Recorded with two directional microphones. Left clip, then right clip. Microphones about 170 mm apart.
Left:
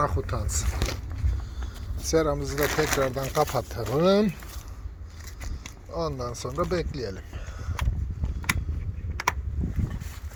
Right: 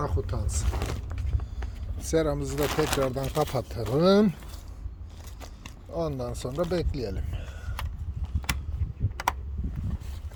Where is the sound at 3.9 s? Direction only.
35° right (ahead or behind).